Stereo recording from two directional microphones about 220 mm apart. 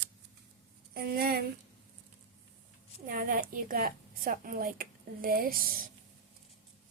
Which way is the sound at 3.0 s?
40° right (ahead or behind).